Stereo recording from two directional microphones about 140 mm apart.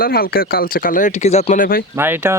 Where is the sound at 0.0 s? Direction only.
90° left; by 1.5 s 50° left (ahead or behind).